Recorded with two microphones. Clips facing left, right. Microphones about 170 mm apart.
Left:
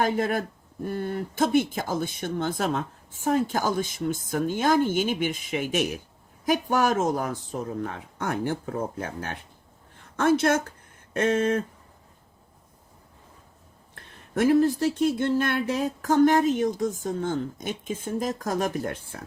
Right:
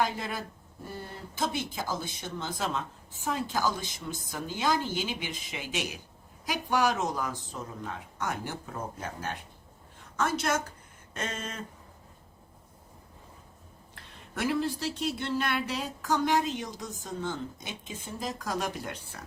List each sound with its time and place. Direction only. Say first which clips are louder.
0.0 s speech: left 7 dB; 50° left (ahead or behind)
13.9 s speech: left 10 dB; 45° left (ahead or behind)